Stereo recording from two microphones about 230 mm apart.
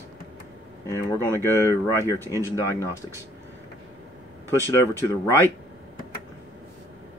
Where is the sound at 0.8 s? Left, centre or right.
Centre.